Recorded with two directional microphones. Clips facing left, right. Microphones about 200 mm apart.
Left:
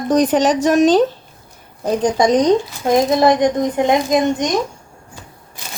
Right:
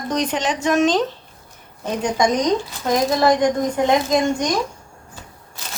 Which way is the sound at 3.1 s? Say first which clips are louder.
Left 3 dB; 20° left (ahead or behind).